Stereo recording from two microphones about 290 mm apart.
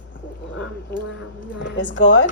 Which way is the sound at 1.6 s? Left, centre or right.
Left.